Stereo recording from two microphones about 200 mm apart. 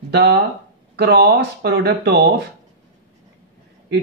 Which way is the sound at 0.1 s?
55° right (ahead or behind).